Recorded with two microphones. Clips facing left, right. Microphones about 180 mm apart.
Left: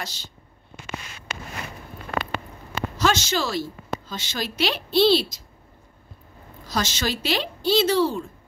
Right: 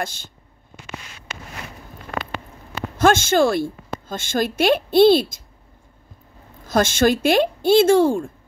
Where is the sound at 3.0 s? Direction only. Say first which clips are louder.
Right 8 dB; 50° right (ahead or behind).